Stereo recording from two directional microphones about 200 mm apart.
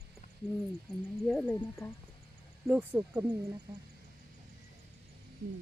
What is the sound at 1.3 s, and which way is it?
Speech, centre (ahead or behind).